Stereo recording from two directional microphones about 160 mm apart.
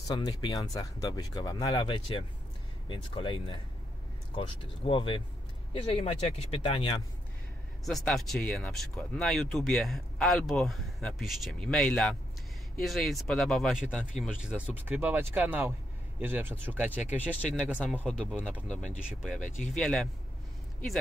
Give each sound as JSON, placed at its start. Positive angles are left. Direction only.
{"t": 0.1, "sound": "speech", "side_deg": 25}
{"t": 7.8, "sound": "speech", "side_deg": 0}
{"t": 17.3, "sound": "speech", "side_deg": 5}
{"t": 17.6, "sound": "speech", "side_deg": -5}
{"t": 17.9, "sound": "speech", "side_deg": 5}
{"t": 19.7, "sound": "speech", "side_deg": 5}